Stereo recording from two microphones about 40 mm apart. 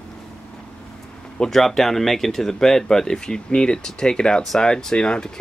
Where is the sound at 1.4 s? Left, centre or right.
Centre.